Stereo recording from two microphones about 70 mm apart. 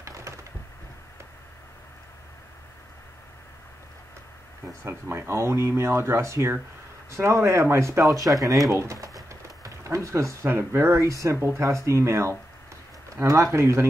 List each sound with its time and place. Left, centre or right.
0.0 s a sound: right
4.8 s speech: right
8.1 s speech: right
8.7 s a sound: right
9.8 s speech: right
10.4 s speech: right